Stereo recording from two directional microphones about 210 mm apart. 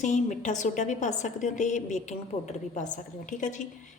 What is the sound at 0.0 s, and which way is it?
A woman's voice, 35° left (ahead or behind).